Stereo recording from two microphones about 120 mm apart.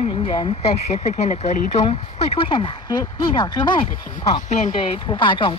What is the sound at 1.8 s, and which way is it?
Speech, 50° left (ahead or behind).